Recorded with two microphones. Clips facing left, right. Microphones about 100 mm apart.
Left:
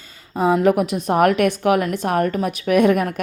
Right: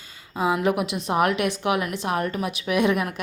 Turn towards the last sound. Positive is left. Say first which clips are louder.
# left 6 dB
turn(degrees=45)  # may be behind; listen again after turning